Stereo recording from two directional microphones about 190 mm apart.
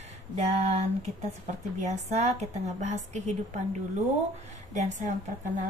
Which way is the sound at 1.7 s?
40° right (ahead or behind).